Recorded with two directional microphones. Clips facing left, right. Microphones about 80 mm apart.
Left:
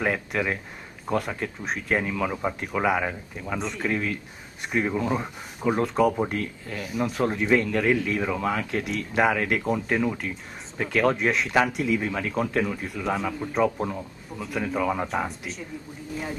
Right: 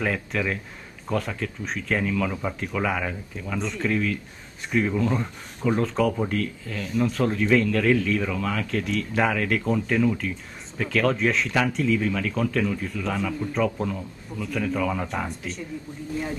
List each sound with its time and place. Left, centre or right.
0.0 s speech: centre
3.5 s speech: centre
3.9 s speech: centre
15.0 s speech: centre